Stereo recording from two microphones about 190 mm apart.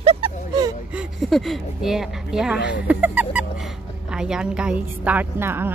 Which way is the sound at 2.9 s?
10° right (ahead or behind).